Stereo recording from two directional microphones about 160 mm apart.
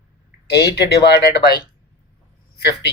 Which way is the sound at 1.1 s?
90° left.